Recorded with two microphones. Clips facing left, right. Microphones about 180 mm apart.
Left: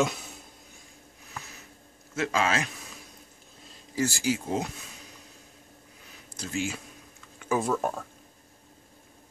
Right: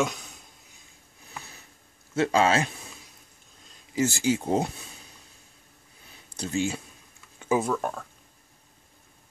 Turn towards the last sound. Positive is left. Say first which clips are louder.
# left 1 dB
turn(degrees=5)  # may be behind; listen again after turning